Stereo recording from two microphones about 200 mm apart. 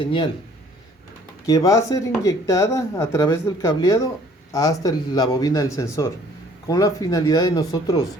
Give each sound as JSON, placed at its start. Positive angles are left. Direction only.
{"t": 0.0, "sound": "speech", "side_deg": 25}
{"t": 1.5, "sound": "speech", "side_deg": 15}